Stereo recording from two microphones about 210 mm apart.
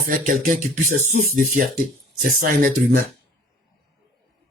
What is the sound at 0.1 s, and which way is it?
Speech, 40° right (ahead or behind).